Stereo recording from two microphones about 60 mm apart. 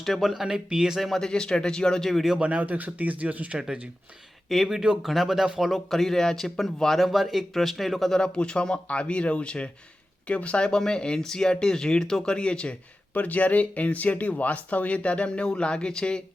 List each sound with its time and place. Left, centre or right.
0.0 s speech: centre
2.0 s speech: centre
2.4 s speech: right
4.4 s speech: centre
8.2 s speech: centre
13.1 s speech: left